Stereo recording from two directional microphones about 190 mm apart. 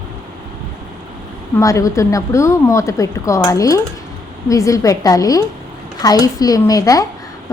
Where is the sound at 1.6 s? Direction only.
15° left (ahead or behind).